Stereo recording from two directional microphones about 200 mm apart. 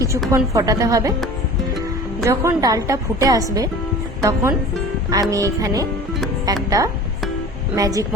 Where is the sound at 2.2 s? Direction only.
15° right (ahead or behind).